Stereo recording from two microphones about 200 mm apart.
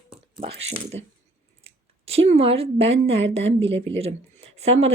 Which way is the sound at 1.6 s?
30° right (ahead or behind).